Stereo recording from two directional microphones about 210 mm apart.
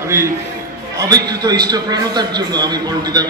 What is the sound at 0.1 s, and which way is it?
A man's voice, 15° right (ahead or behind).